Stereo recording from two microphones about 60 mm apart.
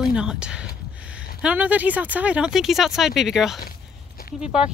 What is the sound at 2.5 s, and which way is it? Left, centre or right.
Speech, centre.